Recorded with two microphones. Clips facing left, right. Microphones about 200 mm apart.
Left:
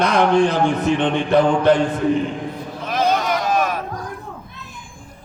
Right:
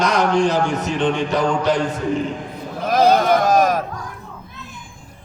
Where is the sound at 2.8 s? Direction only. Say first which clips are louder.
Right 5 dB; 40° right (ahead or behind).